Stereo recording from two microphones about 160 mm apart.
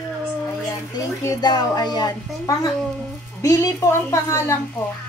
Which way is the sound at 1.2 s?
25° left (ahead or behind).